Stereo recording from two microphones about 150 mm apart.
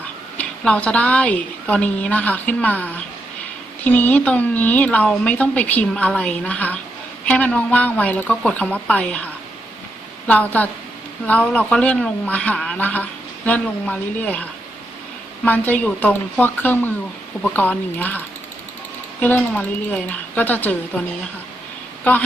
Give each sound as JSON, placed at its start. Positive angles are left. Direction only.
{"t": 0.3, "sound": "speech", "side_deg": 10}
{"t": 15.4, "sound": "speech", "side_deg": 10}
{"t": 19.2, "sound": "speech", "side_deg": 10}
{"t": 22.1, "sound": "speech", "side_deg": 10}